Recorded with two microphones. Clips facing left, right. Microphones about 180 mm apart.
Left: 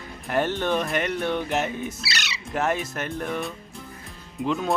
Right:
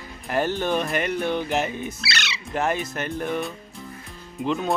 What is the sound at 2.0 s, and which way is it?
Music, 40° left (ahead or behind).